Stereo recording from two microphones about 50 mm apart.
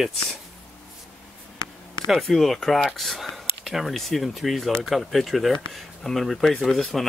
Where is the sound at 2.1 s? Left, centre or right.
Centre.